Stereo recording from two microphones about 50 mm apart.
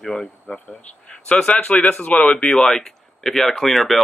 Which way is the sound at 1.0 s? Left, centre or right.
Left.